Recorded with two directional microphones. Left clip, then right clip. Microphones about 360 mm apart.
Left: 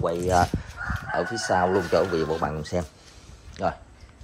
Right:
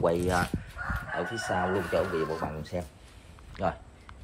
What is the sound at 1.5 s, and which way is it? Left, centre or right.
Speech, centre.